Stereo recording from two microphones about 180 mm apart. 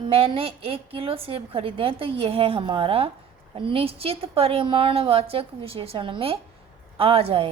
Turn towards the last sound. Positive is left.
turn(degrees=-30)  # may be behind; listen again after turning